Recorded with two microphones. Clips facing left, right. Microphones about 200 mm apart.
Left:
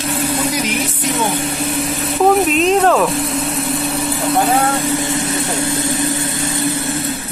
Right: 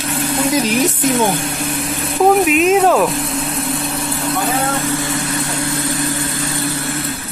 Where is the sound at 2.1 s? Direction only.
5° right (ahead or behind).